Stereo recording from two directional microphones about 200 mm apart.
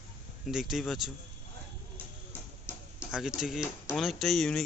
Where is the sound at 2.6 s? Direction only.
5° right (ahead or behind).